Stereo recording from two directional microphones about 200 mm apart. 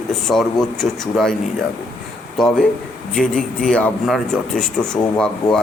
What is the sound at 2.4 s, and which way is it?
A man's voice, centre (ahead or behind).